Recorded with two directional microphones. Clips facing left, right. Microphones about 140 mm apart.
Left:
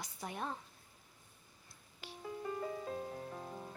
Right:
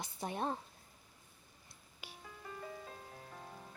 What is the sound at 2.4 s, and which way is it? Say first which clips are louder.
Music: left 7 dB; 40° left (ahead or behind).